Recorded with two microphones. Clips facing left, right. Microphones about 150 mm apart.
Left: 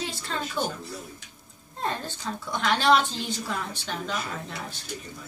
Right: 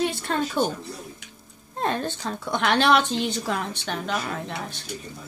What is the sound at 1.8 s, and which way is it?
A woman's voice, 65° right (ahead or behind).